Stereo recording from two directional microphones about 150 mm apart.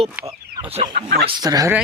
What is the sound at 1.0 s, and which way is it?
Speech, 90° right.